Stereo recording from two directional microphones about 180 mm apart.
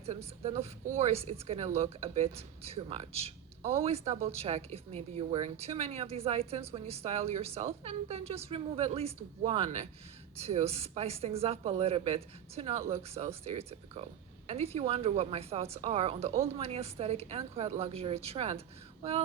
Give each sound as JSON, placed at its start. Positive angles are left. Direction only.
{"t": 0.4, "sound": "speech", "side_deg": -35}